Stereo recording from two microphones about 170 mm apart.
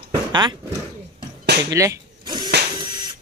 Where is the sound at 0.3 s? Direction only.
25° right (ahead or behind).